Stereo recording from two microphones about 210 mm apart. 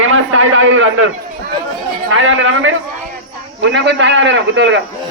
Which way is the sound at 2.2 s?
65° right (ahead or behind).